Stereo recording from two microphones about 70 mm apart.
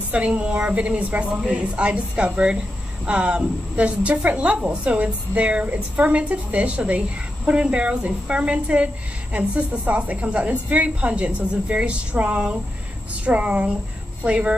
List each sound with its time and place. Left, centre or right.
0.1 s a woman's voice: centre